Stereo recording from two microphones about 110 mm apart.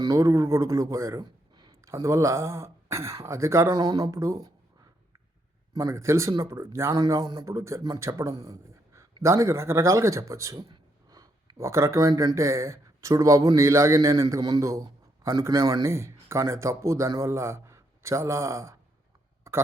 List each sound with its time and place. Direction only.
0.0 s speech: 30° right (ahead or behind)
1.8 s speech: 25° right (ahead or behind)
5.7 s speech: 25° right (ahead or behind)